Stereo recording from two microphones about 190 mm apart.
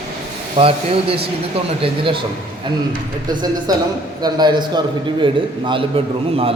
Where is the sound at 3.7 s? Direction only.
20° right (ahead or behind).